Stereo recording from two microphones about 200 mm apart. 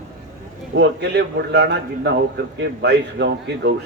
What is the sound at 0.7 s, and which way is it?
A man's voice, 60° right (ahead or behind).